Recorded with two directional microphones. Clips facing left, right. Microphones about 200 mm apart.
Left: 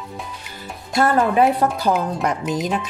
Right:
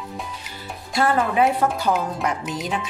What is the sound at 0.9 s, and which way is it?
Speech, 40° left (ahead or behind).